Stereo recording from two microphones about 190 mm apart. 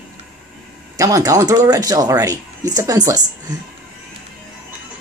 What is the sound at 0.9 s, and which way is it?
Speech, 20° right (ahead or behind).